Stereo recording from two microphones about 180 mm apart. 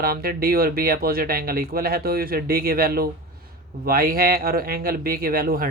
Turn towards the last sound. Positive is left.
turn(degrees=-55)  # may be behind; listen again after turning